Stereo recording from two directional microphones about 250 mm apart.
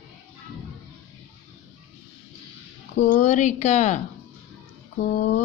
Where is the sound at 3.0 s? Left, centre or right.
Left.